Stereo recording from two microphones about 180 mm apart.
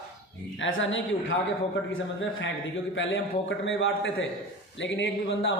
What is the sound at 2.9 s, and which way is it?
A man's voice, 90° left.